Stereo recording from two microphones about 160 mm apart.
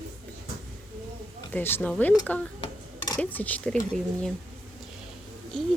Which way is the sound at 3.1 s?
10° left (ahead or behind).